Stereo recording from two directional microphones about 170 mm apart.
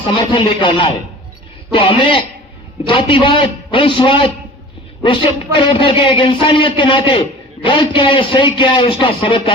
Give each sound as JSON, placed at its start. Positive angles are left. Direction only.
{"t": 0.0, "sound": "a man's voice", "side_deg": 30}